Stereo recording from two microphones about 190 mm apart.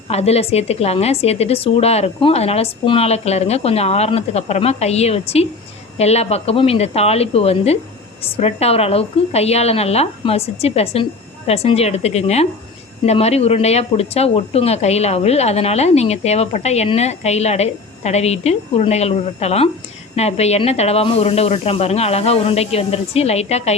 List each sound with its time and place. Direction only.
0.1 s speech: 35° left (ahead or behind)